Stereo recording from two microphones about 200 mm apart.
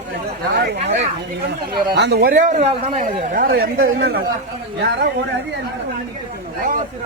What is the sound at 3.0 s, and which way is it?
Speech, 40° right (ahead or behind).